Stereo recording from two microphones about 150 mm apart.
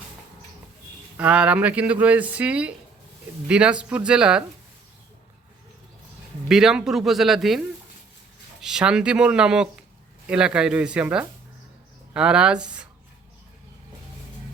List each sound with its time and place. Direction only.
1.1 s speech: 10° right (ahead or behind)
6.5 s speech: 5° right (ahead or behind)
8.6 s speech: 5° right (ahead or behind)